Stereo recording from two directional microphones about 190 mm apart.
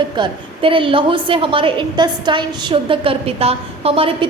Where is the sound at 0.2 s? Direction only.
25° right (ahead or behind).